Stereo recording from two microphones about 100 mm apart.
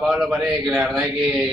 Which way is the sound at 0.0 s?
5° right (ahead or behind).